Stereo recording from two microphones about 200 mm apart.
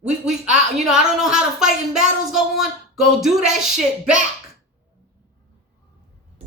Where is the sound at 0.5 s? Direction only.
5° right (ahead or behind).